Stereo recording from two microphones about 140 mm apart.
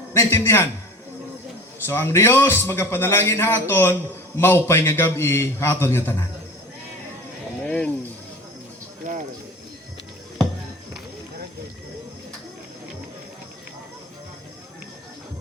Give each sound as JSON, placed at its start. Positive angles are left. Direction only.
{"t": 0.1, "sound": "a man's voice", "side_deg": 20}
{"t": 1.9, "sound": "a man's voice", "side_deg": 15}
{"t": 7.6, "sound": "a sound", "side_deg": 10}